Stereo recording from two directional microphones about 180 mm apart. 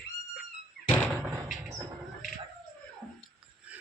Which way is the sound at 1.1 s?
15° right (ahead or behind).